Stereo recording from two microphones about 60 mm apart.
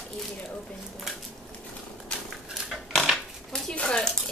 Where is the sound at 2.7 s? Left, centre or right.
Centre.